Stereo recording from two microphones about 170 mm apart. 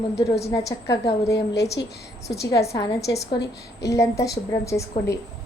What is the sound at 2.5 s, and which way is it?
Speech, 20° left (ahead or behind).